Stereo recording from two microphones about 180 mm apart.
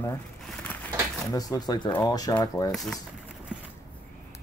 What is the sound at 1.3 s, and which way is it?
Speech, 20° left (ahead or behind).